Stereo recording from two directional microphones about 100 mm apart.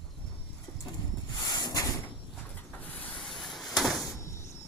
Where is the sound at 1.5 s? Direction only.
40° left (ahead or behind).